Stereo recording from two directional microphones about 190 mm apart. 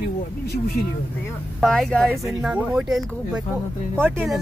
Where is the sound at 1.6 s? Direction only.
Centre (ahead or behind).